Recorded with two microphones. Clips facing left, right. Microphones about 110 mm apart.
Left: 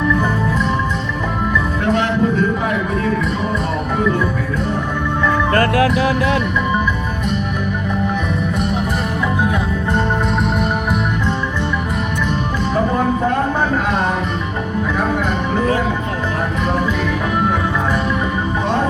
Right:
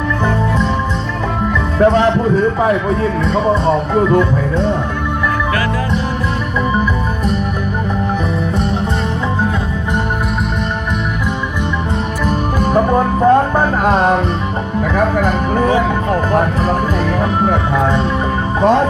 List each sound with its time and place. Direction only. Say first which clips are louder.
1.8 s music: right 7 dB; 30° right (ahead or behind)